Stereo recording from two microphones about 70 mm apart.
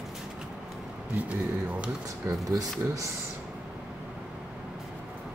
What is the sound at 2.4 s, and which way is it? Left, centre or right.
Speech, right.